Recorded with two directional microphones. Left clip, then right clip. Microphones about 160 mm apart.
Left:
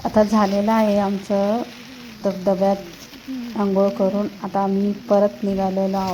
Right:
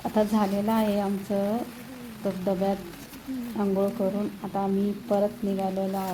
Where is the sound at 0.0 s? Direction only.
35° left (ahead or behind).